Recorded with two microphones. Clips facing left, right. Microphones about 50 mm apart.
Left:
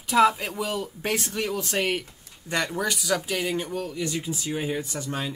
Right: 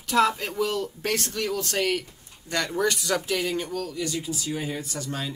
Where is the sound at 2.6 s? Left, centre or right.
Centre.